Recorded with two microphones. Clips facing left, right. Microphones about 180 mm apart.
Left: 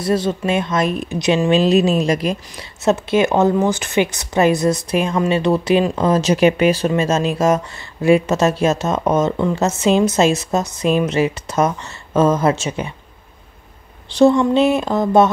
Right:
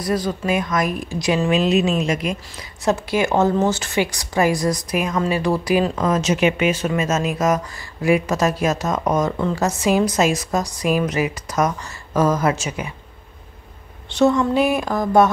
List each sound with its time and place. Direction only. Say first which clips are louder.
0.0 s a woman's voice: left 4 dB; 25° left (ahead or behind)
2.8 s a woman's voice: left 4 dB; 20° left (ahead or behind)
14.0 s a woman's voice: left 4 dB; 35° left (ahead or behind)